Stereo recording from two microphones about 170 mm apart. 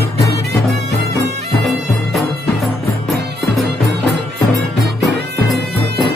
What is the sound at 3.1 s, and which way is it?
Music, 90° right.